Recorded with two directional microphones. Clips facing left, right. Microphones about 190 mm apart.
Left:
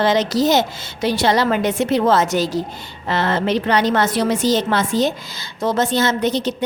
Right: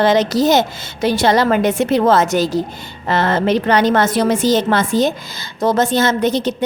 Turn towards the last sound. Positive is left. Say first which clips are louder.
# right 3 dB
turn(degrees=-50)  # may be behind; listen again after turning